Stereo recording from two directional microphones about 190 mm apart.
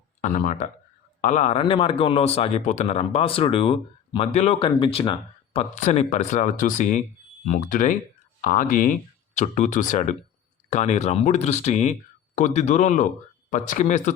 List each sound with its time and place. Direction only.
0.2 s speech: 40° left (ahead or behind)